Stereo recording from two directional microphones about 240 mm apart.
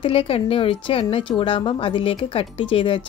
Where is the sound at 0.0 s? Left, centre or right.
Left.